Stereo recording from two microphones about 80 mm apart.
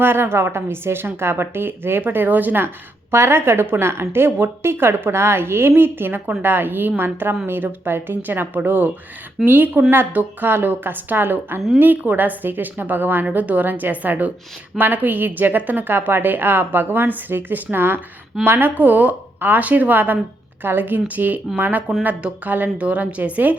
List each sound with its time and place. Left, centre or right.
0.0 s a woman's voice: right